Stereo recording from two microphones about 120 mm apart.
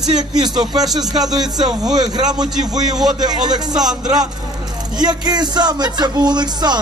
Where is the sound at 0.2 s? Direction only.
35° right (ahead or behind).